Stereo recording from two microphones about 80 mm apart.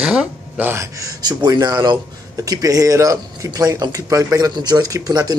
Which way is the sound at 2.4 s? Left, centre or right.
Right.